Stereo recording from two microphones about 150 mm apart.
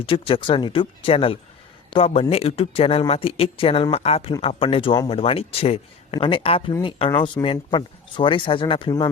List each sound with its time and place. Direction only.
0.0 s speech: 35° left (ahead or behind)